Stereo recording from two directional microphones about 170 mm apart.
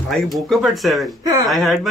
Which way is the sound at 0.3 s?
Centre (ahead or behind).